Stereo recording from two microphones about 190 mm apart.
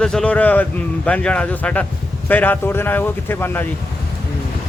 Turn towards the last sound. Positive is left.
turn(degrees=10)  # may be behind; listen again after turning